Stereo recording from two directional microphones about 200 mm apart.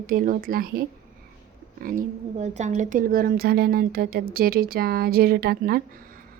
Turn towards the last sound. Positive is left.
turn(degrees=-45)  # may be behind; listen again after turning